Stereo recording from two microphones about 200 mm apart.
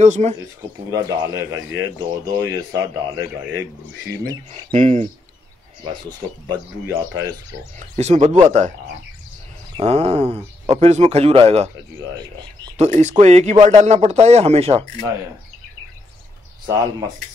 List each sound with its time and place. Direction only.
0.0 s speech: 35° right (ahead or behind)
0.6 s a man's voice: 15° right (ahead or behind)
4.5 s speech: 35° right (ahead or behind)
6.5 s a man's voice: 15° right (ahead or behind)
8.0 s speech: 35° right (ahead or behind)
9.8 s speech: 30° right (ahead or behind)
12.7 s speech: 35° right (ahead or behind)